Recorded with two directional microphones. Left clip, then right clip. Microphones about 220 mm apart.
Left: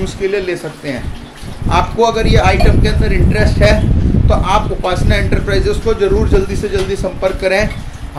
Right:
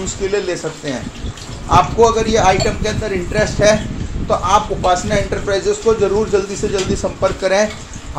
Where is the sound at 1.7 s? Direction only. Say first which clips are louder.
Right 1 dB; 5° left (ahead or behind).